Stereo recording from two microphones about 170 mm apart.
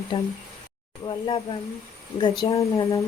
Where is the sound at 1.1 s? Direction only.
30° left (ahead or behind).